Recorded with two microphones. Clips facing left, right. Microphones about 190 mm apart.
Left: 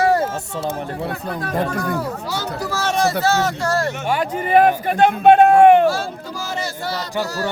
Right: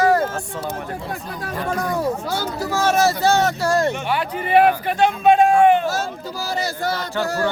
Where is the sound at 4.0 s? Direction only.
45° left (ahead or behind); by 5.9 s 60° left (ahead or behind).